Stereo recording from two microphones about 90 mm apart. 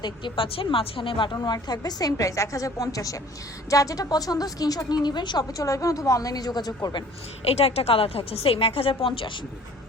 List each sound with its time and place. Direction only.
0.0 s speech: 75° left (ahead or behind)
1.5 s a woman's voice: 50° left (ahead or behind)
7.6 s a woman's voice: 90° left